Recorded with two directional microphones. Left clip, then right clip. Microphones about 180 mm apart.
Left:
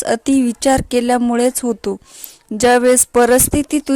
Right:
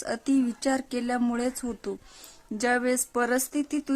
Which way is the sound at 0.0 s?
40° left (ahead or behind).